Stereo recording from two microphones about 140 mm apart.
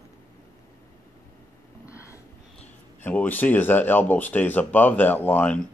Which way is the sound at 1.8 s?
20° left (ahead or behind).